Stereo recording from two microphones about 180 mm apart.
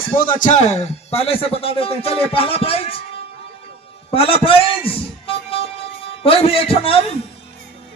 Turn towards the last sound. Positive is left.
turn(degrees=30)  # may be behind; listen again after turning